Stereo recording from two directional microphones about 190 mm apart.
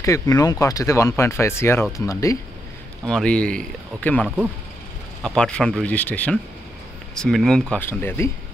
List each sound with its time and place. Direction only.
0.0 s speech: 15° left (ahead or behind)
3.1 s speech: 5° left (ahead or behind)